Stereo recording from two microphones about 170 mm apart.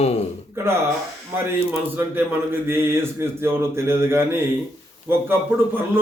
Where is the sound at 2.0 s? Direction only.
10° right (ahead or behind).